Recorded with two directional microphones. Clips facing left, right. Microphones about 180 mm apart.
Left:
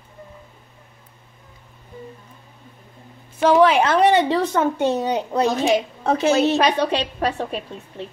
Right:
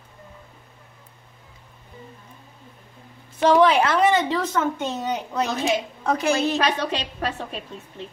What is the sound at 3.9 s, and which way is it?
A woman's voice, 35° left (ahead or behind).